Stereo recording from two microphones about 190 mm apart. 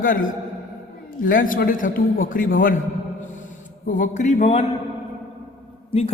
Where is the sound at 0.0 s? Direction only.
45° left (ahead or behind).